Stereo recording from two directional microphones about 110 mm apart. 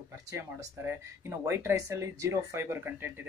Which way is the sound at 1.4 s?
25° right (ahead or behind).